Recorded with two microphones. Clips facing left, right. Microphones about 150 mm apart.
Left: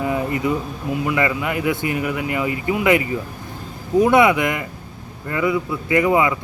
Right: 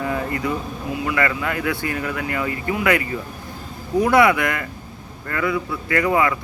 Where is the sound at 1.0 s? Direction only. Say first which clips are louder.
Left 1 dB; 15° left (ahead or behind).